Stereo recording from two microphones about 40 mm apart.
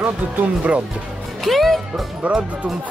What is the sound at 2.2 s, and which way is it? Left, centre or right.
Speech, right.